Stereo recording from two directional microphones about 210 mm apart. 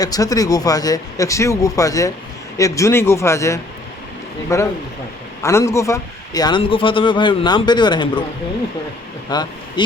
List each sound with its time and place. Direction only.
0.0 s a man's voice: 15° left (ahead or behind)
9.3 s speech: 20° left (ahead or behind)